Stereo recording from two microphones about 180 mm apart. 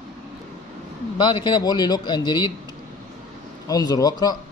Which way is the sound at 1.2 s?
25° left (ahead or behind).